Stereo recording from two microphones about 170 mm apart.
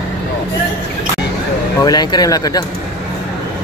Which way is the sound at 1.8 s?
25° left (ahead or behind).